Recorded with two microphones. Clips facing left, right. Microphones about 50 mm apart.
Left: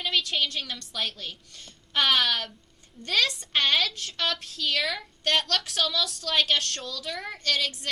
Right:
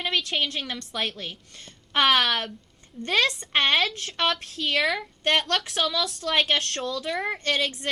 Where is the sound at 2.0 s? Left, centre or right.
Centre.